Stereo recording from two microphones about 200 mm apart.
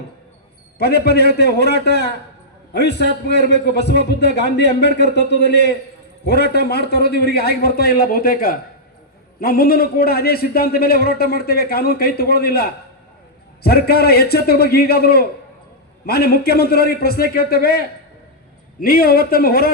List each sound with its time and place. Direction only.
0.8 s a man's voice: 55° left (ahead or behind)